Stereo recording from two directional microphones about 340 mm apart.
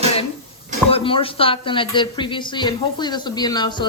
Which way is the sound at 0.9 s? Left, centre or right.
Centre.